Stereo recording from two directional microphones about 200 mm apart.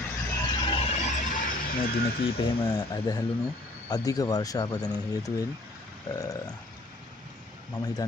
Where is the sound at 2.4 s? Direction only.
25° left (ahead or behind).